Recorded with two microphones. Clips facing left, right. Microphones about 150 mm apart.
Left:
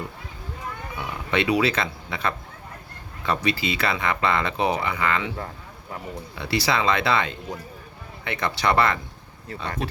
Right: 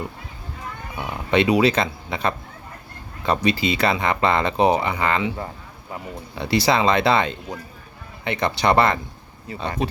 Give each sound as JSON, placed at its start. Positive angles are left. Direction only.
{"t": 0.9, "sound": "speech", "side_deg": -20}
{"t": 6.3, "sound": "speech", "side_deg": -20}